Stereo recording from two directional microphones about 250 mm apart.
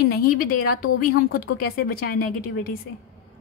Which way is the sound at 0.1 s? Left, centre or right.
Left.